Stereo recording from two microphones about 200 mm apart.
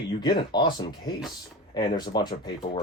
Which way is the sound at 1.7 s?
20° left (ahead or behind).